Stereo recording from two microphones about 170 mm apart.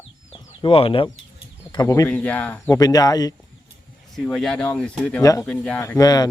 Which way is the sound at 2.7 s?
20° left (ahead or behind).